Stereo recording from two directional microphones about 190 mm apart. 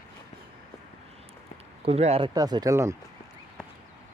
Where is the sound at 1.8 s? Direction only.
35° right (ahead or behind).